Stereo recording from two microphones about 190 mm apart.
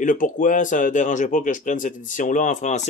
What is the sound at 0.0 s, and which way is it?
Speech, 45° left (ahead or behind).